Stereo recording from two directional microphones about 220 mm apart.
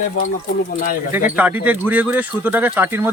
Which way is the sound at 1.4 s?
5° right (ahead or behind).